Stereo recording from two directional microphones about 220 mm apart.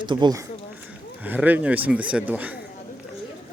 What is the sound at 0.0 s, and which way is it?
Speech, 20° right (ahead or behind).